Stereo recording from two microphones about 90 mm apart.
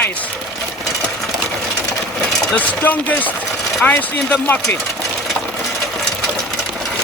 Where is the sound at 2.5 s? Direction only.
20° left (ahead or behind).